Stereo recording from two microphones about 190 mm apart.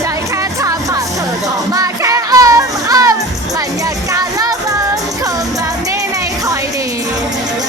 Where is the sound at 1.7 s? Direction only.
20° right (ahead or behind).